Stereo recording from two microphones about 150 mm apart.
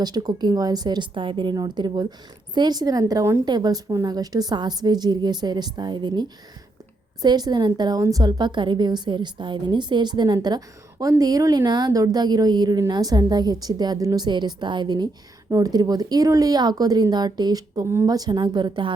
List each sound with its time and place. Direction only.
0.0 s a woman's voice: 25° right (ahead or behind)